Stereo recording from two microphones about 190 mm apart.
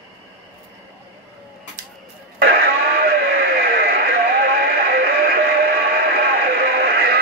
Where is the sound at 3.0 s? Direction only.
55° right (ahead or behind).